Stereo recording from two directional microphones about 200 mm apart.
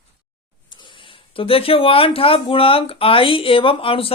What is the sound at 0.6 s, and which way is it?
A man's voice, 25° left (ahead or behind).